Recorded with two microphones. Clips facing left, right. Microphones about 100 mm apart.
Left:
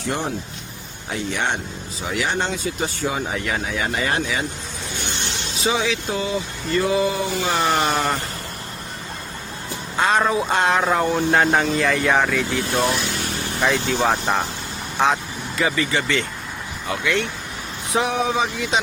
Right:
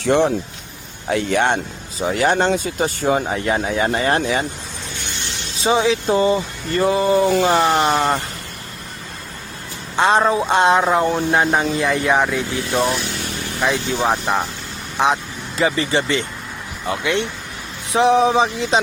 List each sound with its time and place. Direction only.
0.0 s speech: 90° right
1.1 s speech: 65° right (ahead or behind)
2.0 s speech: 45° right (ahead or behind)
5.6 s speech: 30° right (ahead or behind)
9.9 s speech: 25° right (ahead or behind)
13.6 s speech: 10° right (ahead or behind)
15.5 s speech: 30° right (ahead or behind)